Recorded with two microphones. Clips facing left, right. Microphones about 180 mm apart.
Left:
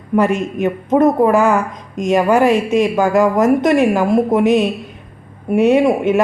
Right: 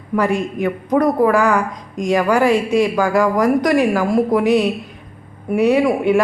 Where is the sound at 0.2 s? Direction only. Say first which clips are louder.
Left 3 dB; 20° left (ahead or behind).